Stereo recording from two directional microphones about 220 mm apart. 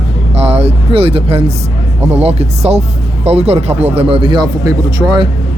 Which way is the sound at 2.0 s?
30° right (ahead or behind).